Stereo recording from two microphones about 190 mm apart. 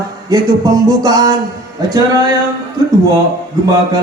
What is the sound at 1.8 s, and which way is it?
Speech, 20° right (ahead or behind).